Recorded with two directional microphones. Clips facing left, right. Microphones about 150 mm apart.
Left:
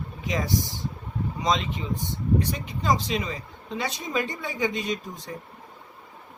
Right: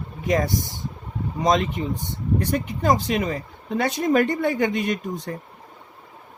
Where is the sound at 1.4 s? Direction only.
55° right (ahead or behind).